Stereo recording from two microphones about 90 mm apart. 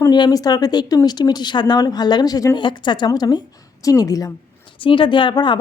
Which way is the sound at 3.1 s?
45° left (ahead or behind).